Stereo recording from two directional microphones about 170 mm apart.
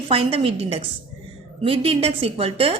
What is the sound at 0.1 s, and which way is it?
A woman's voice, 35° right (ahead or behind).